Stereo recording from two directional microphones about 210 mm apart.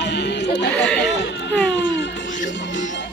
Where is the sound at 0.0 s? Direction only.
55° left (ahead or behind).